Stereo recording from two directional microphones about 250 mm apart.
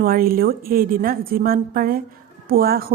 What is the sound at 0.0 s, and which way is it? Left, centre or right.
A woman's voice, right.